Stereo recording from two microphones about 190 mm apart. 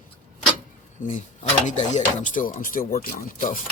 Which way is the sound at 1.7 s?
40° left (ahead or behind).